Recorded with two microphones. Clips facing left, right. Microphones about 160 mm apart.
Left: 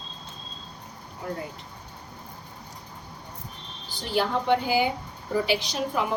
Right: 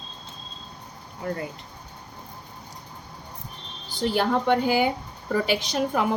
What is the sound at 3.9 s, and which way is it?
A woman's voice, 50° right (ahead or behind).